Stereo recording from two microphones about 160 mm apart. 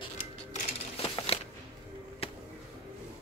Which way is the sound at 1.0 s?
40° left (ahead or behind).